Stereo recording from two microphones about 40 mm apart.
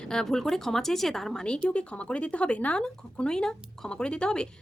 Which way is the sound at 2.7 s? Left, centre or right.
Left.